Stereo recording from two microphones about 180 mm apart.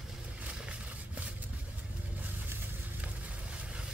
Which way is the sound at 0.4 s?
5° right (ahead or behind).